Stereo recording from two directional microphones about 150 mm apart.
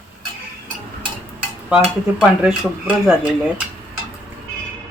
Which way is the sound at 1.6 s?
5° right (ahead or behind).